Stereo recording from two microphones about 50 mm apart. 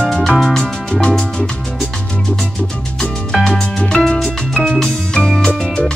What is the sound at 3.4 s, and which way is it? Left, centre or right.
Music, centre.